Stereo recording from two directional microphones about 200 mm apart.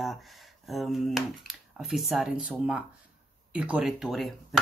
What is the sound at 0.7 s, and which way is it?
Speech, centre (ahead or behind).